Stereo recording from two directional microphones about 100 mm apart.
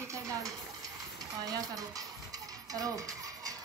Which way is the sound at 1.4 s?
40° right (ahead or behind).